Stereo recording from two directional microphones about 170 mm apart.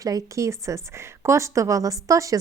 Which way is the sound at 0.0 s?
20° right (ahead or behind).